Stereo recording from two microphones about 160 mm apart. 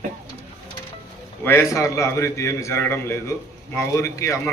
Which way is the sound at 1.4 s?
15° left (ahead or behind).